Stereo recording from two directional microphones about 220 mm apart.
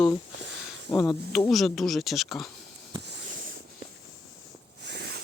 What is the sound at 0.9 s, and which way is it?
Speech, 15° left (ahead or behind).